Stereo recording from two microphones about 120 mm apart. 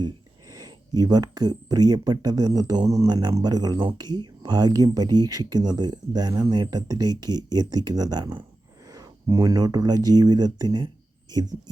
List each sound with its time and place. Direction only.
0.5 s speech: 30° right (ahead or behind)